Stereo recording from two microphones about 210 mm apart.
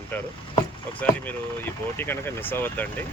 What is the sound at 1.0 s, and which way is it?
Speech, 10° left (ahead or behind).